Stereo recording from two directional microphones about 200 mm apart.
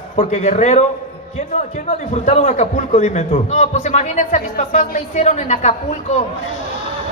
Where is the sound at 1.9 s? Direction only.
35° left (ahead or behind).